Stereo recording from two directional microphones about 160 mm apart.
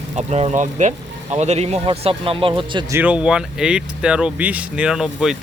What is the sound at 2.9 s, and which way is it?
Speech, 10° right (ahead or behind).